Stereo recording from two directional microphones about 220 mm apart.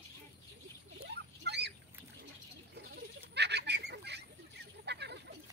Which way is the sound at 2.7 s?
50° right (ahead or behind).